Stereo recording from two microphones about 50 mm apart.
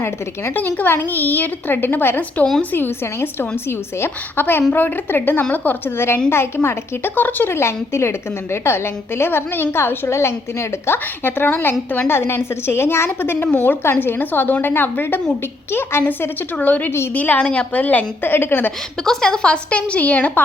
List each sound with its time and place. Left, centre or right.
0.5 s a woman's voice: left
6.3 s a woman's voice: left
7.5 s a woman's voice: left
12.1 s a woman's voice: left
13.2 s a woman's voice: left
15.7 s a woman's voice: left
16.6 s a woman's voice: left
17.4 s a woman's voice: centre
17.7 s a woman's voice: left
19.0 s a woman's voice: centre; by 20.4 s left